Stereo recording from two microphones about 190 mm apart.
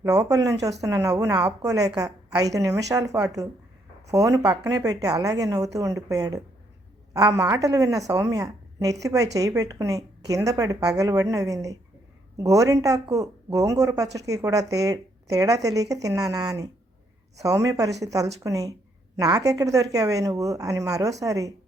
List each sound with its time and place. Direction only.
0.0 s a woman's voice: 15° right (ahead or behind)